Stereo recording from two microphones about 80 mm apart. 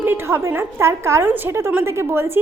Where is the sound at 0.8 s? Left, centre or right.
Right.